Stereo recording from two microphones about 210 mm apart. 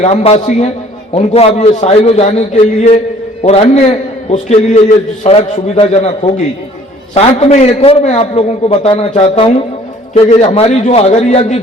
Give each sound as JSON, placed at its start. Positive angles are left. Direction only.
{"t": 0.0, "sound": "a man's voice", "side_deg": 30}